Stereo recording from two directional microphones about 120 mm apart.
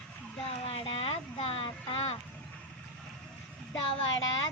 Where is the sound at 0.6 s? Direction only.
55° left (ahead or behind).